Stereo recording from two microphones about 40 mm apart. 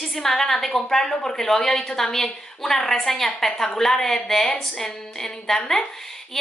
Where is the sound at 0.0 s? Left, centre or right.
Centre.